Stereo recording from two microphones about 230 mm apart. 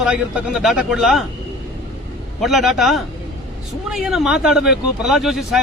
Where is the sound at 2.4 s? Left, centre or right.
Centre.